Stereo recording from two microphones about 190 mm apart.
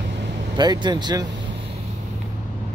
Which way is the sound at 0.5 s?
20° right (ahead or behind).